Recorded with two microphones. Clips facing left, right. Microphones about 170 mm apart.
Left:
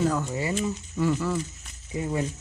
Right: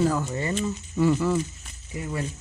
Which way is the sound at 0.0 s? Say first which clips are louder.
Right 2 dB; 5° right (ahead or behind).